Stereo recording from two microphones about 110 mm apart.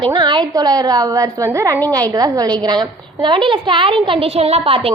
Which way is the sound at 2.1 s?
35° right (ahead or behind).